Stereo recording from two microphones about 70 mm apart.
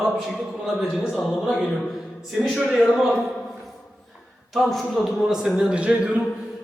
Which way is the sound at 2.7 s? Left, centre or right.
Centre.